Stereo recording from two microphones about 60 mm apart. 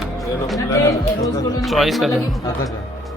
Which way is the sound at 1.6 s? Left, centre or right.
Centre.